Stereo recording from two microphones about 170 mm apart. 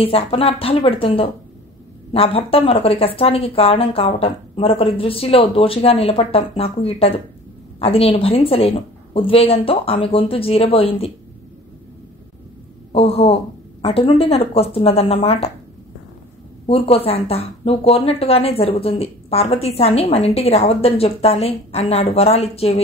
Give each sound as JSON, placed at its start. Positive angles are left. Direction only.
{"t": 0.0, "sound": "speech", "side_deg": 35}
{"t": 12.9, "sound": "speech", "side_deg": 35}
{"t": 16.6, "sound": "speech", "side_deg": 35}